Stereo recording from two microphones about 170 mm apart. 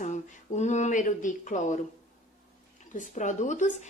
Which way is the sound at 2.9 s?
45° left (ahead or behind).